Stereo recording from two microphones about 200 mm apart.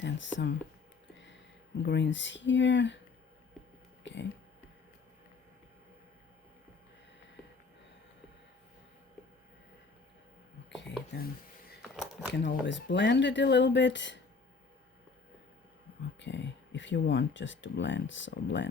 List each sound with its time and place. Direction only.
0.0 s speech: 65° left (ahead or behind)
1.8 s speech: 60° left (ahead or behind)
4.0 s speech: 65° left (ahead or behind)
11.8 s a sound: centre (ahead or behind)
12.3 s speech: 60° left (ahead or behind)
16.2 s speech: 65° left (ahead or behind)